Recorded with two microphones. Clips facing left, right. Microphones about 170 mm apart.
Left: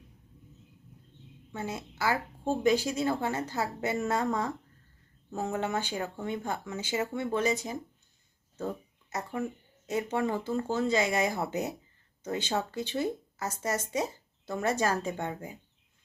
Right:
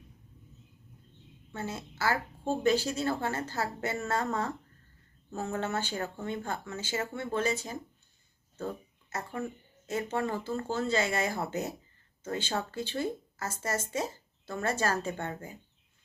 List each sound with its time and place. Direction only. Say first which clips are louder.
1.5 s speech: left 1 dB; 15° left (ahead or behind)
9.0 s speech: left 2 dB; 15° left (ahead or behind)